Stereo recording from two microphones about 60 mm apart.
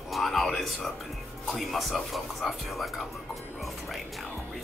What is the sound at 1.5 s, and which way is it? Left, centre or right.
Speech, centre.